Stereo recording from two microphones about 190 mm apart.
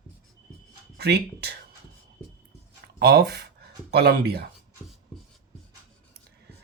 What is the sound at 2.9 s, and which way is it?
Speech, 60° right (ahead or behind).